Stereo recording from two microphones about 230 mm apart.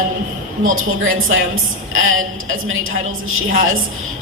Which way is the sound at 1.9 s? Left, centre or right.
Right.